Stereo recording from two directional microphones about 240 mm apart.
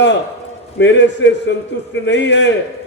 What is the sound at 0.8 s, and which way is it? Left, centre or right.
A man's voice, left.